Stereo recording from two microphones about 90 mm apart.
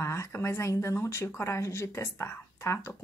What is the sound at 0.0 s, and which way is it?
Speech, 30° left (ahead or behind).